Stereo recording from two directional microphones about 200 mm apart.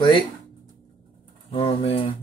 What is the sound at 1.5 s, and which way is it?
Speech, 25° left (ahead or behind).